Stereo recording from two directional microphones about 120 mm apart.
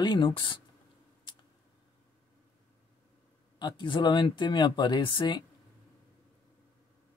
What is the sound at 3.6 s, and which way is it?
Speech, 40° left (ahead or behind).